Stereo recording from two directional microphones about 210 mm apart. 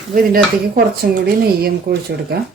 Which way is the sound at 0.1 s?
45° right (ahead or behind).